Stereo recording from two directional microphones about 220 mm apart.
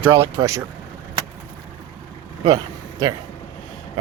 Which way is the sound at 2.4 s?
15° right (ahead or behind).